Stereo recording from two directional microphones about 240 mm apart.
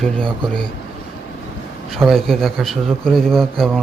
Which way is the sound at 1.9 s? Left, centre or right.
Centre.